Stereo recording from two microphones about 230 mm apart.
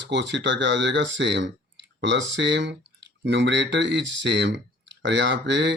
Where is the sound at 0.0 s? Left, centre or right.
Right.